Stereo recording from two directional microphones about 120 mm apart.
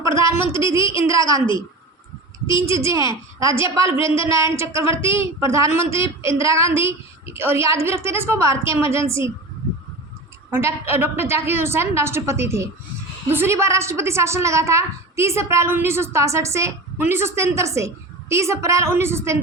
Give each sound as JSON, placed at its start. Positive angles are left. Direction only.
{"t": 0.2, "sound": "a woman's voice", "side_deg": -25}
{"t": 0.4, "sound": "a woman's voice", "side_deg": 50}
{"t": 1.1, "sound": "a woman's voice", "side_deg": -25}
{"t": 2.5, "sound": "a woman's voice", "side_deg": 45}
{"t": 2.7, "sound": "a woman's voice", "side_deg": -25}
{"t": 4.0, "sound": "a woman's voice", "side_deg": 45}
{"t": 4.3, "sound": "a woman's voice", "side_deg": -25}
{"t": 4.9, "sound": "a woman's voice", "side_deg": 50}
{"t": 5.2, "sound": "a woman's voice", "side_deg": -25}
{"t": 5.8, "sound": "a woman's voice", "side_deg": 50}
{"t": 6.2, "sound": "a woman's voice", "side_deg": -25}
{"t": 10.5, "sound": "a woman's voice", "side_deg": -20}